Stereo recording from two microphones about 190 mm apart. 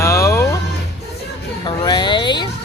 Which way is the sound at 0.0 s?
15° left (ahead or behind).